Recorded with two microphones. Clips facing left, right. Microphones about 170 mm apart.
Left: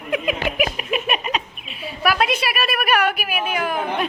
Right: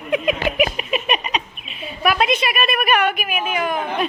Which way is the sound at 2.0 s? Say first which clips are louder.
Right 2 dB; centre (ahead or behind).